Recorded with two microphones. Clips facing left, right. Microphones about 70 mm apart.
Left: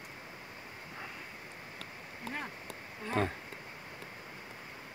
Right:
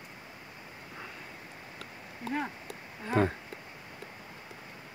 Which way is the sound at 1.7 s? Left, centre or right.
Centre.